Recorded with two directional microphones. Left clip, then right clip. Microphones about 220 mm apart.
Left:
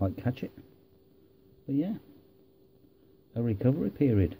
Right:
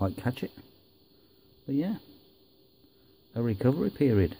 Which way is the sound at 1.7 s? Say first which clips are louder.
Right 1 dB; 30° right (ahead or behind).